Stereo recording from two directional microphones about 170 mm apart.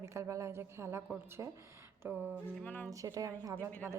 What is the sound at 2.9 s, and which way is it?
Speech, 20° right (ahead or behind).